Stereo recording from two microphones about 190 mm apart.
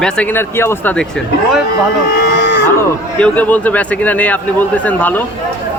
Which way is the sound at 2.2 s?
60° left (ahead or behind).